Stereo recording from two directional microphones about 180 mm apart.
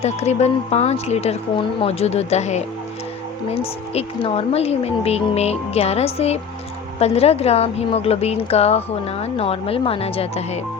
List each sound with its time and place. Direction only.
0.0 s a woman's voice: 40° left (ahead or behind)